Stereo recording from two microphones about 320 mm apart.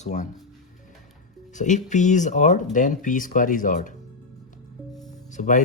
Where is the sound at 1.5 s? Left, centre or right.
Left.